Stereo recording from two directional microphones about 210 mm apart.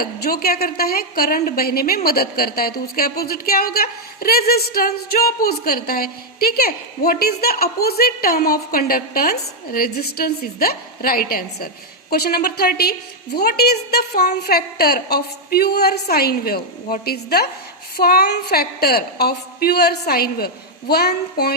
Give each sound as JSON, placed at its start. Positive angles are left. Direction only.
{"t": 0.0, "sound": "speech", "side_deg": 45}